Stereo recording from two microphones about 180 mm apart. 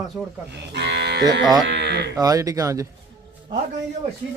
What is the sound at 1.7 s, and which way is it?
Speech, 70° right (ahead or behind).